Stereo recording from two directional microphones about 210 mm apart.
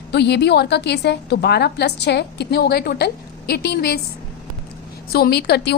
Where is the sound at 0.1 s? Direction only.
55° left (ahead or behind).